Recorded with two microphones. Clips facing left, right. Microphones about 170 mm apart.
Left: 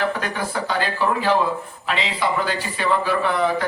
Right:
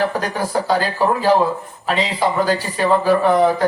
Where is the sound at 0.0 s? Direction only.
40° right (ahead or behind).